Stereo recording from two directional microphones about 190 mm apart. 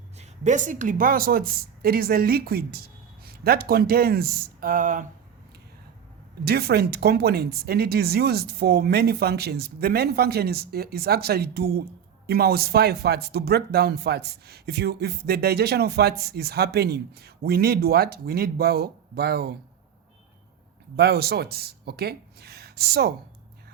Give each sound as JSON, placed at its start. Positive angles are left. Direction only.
{"t": 0.2, "sound": "a woman's voice", "side_deg": -40}
{"t": 6.4, "sound": "speech", "side_deg": -55}
{"t": 20.9, "sound": "speech", "side_deg": -55}